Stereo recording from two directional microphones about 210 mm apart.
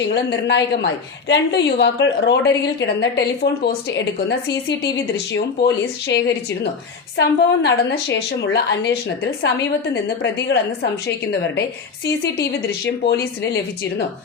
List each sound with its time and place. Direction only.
0.1 s a woman's voice: 55° left (ahead or behind)
9.9 s speech: 55° left (ahead or behind)